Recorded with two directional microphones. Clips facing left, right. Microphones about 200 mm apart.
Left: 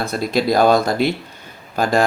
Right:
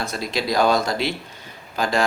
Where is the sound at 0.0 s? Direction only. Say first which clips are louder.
Left 6 dB; 55° left (ahead or behind).